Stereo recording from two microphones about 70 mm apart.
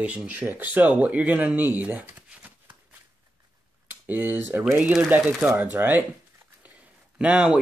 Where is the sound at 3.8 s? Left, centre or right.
Right.